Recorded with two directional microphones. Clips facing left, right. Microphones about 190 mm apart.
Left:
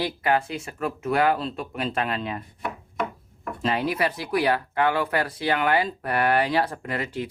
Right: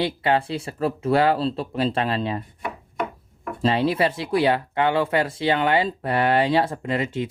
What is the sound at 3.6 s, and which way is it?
Speech, 30° right (ahead or behind).